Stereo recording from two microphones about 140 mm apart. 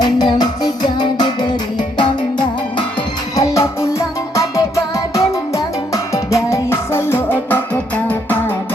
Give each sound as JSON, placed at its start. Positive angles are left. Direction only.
{"t": 0.0, "sound": "music", "side_deg": 30}
{"t": 3.3, "sound": "music", "side_deg": 20}
{"t": 5.9, "sound": "music", "side_deg": 20}